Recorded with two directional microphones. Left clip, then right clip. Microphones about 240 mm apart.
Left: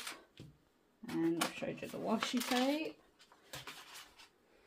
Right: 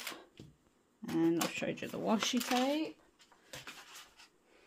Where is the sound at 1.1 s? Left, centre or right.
Right.